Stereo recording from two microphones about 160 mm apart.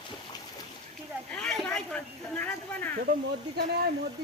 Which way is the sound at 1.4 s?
5° left (ahead or behind).